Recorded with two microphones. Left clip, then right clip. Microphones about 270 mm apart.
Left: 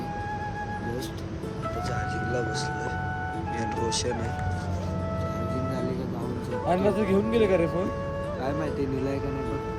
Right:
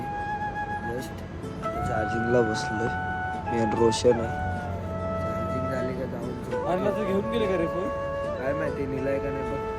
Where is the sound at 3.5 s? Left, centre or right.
Centre.